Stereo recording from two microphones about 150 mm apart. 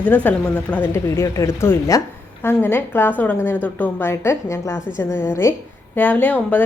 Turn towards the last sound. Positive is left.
turn(degrees=10)  # may be behind; listen again after turning